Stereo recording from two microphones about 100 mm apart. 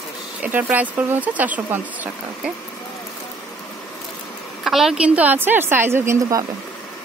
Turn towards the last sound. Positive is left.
turn(degrees=-30)  # may be behind; listen again after turning